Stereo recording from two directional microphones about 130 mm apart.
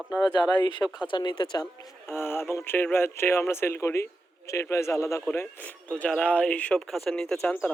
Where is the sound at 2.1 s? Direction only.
15° left (ahead or behind).